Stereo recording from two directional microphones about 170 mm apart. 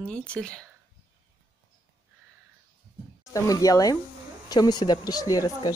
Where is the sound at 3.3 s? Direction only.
20° left (ahead or behind).